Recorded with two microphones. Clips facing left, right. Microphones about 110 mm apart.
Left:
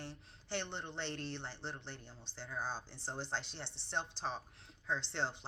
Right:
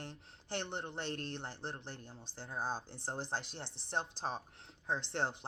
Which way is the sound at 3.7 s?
15° right (ahead or behind).